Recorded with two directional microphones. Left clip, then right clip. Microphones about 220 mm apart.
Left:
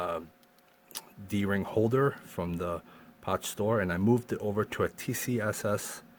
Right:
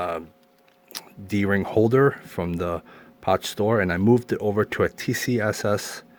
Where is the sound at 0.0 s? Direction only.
25° right (ahead or behind).